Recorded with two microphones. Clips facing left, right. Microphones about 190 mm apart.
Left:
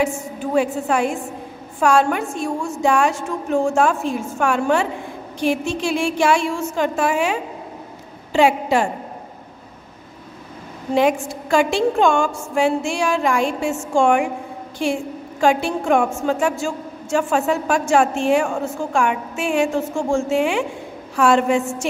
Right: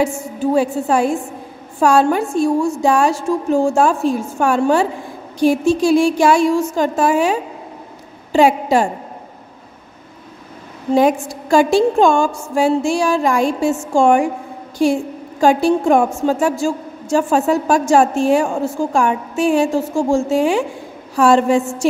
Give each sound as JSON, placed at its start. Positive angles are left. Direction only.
{"t": 0.0, "sound": "a woman's voice", "side_deg": -30}
{"t": 11.0, "sound": "a woman's voice", "side_deg": -35}
{"t": 15.4, "sound": "a woman's voice", "side_deg": -35}